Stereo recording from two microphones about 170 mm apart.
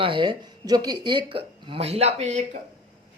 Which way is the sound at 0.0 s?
30° right (ahead or behind).